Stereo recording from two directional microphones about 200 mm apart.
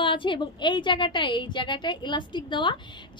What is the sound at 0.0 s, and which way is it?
A woman's voice, 25° left (ahead or behind).